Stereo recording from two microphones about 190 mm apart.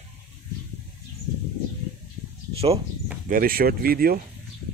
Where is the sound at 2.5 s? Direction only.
30° right (ahead or behind).